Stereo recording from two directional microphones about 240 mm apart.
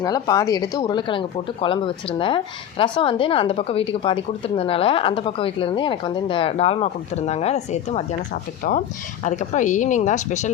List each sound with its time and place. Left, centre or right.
0.0 s speech: centre